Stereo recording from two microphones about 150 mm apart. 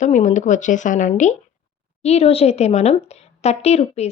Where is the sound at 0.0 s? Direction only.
55° left (ahead or behind).